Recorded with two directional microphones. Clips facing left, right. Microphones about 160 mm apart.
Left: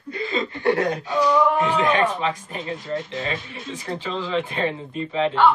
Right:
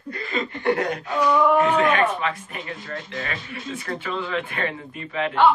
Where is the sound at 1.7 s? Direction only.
30° left (ahead or behind).